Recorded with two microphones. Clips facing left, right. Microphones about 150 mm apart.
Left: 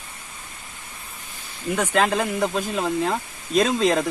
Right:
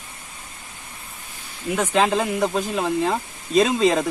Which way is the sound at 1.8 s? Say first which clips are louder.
Right 1 dB; 20° right (ahead or behind).